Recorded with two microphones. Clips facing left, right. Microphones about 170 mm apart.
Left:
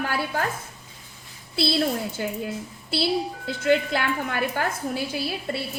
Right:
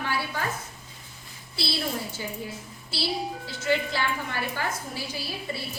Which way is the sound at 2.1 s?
65° left (ahead or behind).